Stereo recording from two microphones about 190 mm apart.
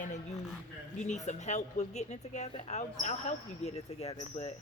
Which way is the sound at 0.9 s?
40° left (ahead or behind).